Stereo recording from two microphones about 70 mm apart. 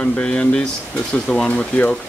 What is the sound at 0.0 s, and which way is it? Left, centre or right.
Speech, centre.